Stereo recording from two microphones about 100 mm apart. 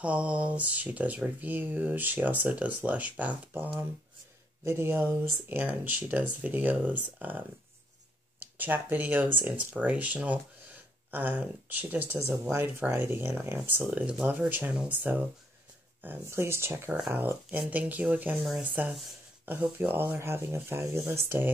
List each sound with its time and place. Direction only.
0.0 s speech: 10° right (ahead or behind)